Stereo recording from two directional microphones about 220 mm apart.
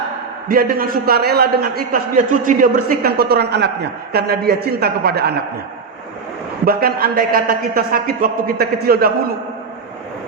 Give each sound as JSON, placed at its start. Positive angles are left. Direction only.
{"t": 0.4, "sound": "a man's voice", "side_deg": -40}
{"t": 6.7, "sound": "a man's voice", "side_deg": -45}